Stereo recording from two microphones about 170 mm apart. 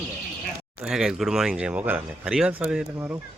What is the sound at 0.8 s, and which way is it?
Speech, 5° right (ahead or behind).